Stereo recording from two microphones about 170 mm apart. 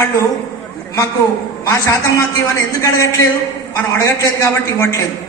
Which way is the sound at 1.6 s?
15° left (ahead or behind).